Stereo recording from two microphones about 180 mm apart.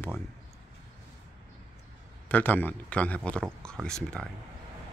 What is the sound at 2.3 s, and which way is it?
A man's voice, 10° left (ahead or behind).